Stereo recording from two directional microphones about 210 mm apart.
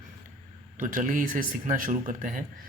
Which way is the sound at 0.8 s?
40° right (ahead or behind).